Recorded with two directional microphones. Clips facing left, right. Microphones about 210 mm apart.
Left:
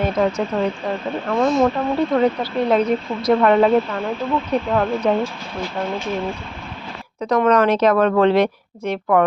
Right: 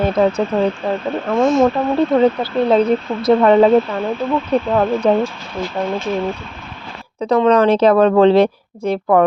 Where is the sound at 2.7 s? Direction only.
30° right (ahead or behind).